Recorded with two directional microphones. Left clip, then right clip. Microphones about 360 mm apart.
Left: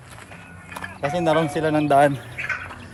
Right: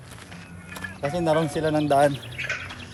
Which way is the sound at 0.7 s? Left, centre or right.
Centre.